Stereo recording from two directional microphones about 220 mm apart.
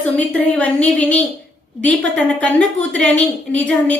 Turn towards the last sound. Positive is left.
turn(degrees=5)  # may be behind; listen again after turning